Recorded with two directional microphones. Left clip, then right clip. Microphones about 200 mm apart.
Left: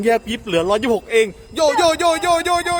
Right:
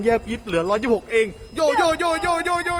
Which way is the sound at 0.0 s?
45° left (ahead or behind).